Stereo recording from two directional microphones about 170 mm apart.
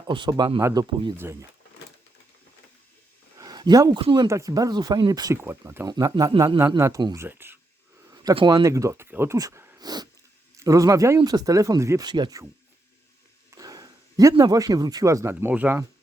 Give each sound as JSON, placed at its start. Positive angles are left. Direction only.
{"t": 0.1, "sound": "speech", "side_deg": -25}
{"t": 3.3, "sound": "a sound", "side_deg": -25}
{"t": 4.1, "sound": "speech", "side_deg": -20}
{"t": 8.1, "sound": "a sound", "side_deg": -20}
{"t": 8.4, "sound": "speech", "side_deg": -30}
{"t": 8.6, "sound": "speech", "side_deg": -20}
{"t": 13.5, "sound": "speech", "side_deg": -20}